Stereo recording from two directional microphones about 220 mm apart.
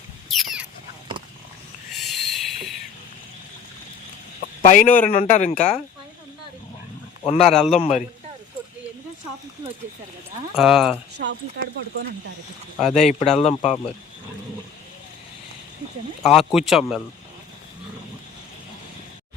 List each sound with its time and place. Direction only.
0.3 s a sound: centre (ahead or behind)
1.9 s a sound: centre (ahead or behind)
4.6 s speech: 35° left (ahead or behind)
7.3 s speech: 25° left (ahead or behind)
7.5 s speech: centre (ahead or behind)
7.8 s speech: 30° left (ahead or behind)
10.5 s speech: centre (ahead or behind)
11.2 s speech: 50° right (ahead or behind)
12.9 s speech: 30° left (ahead or behind)
16.2 s speech: centre (ahead or behind)